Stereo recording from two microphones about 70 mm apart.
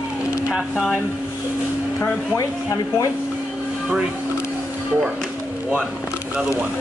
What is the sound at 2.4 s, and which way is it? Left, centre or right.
Speech, left.